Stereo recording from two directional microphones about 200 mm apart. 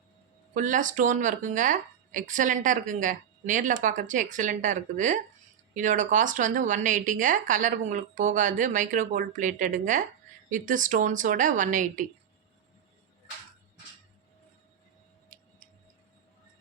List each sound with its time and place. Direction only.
0.5 s speech: 40° right (ahead or behind)
15.3 s tick-tock: 45° right (ahead or behind)